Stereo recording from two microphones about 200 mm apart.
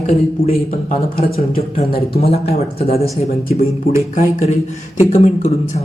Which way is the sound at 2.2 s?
30° left (ahead or behind).